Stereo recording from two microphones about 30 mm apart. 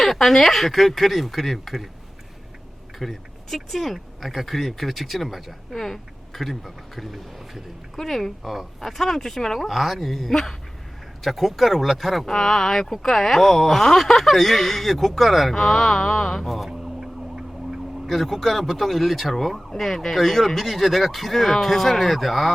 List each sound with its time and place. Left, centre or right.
0.0 s speech: centre
3.0 s speech: centre
12.2 s speech: centre
15.5 s speech: centre
16.6 s vehicle: centre
18.1 s speech: centre